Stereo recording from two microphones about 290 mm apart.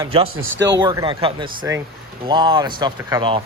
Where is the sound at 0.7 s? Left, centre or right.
Centre.